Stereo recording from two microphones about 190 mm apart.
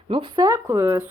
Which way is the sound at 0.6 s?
15° right (ahead or behind).